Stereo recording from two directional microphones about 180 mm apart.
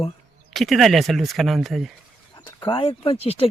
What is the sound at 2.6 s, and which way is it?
Speech, 30° left (ahead or behind).